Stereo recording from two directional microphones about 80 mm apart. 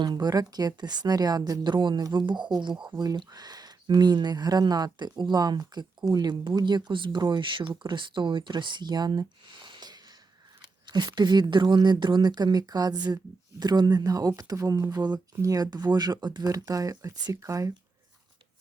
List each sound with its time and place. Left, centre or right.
0.0 s speech: right
1.7 s speech: right
2.2 s speech: right
2.8 s speech: right
9.6 s a sound: right
10.8 s speech: right